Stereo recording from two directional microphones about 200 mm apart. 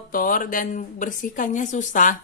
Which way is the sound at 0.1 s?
45° left (ahead or behind).